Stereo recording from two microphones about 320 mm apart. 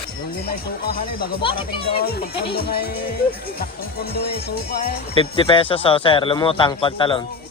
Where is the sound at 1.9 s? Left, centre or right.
Left.